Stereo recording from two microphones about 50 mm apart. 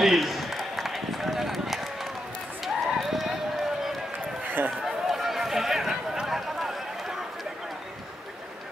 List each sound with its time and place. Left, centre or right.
0.0 s run: centre
4.5 s run: right
4.8 s run: centre